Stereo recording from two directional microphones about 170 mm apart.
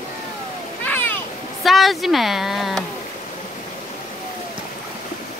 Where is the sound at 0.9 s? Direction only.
10° left (ahead or behind).